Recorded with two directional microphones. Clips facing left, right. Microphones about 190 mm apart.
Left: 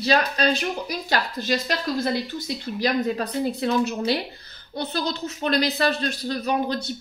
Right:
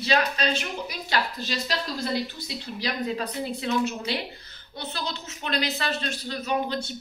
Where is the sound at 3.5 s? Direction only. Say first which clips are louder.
Even; 40° left (ahead or behind).